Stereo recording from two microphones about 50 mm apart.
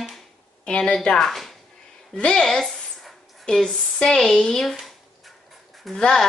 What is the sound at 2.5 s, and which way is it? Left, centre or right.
Speech, centre.